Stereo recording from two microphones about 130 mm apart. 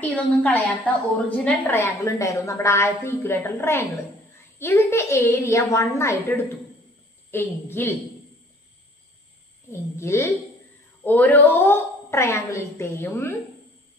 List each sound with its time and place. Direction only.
0.0 s a woman's voice: 10° left (ahead or behind)
9.7 s a woman's voice: 20° left (ahead or behind)